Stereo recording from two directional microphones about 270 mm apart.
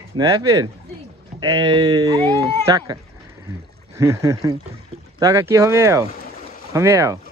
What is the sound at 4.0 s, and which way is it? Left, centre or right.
Speech, centre.